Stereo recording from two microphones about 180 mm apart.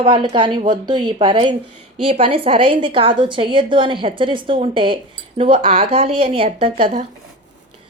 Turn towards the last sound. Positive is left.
turn(degrees=-30)  # may be behind; listen again after turning